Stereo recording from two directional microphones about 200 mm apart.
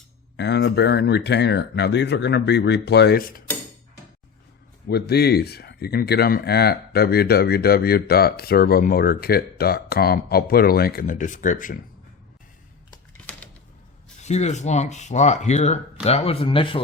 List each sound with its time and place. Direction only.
0.3 s speech: 60° left (ahead or behind)
4.9 s speech: 55° left (ahead or behind)
14.2 s speech: 35° left (ahead or behind)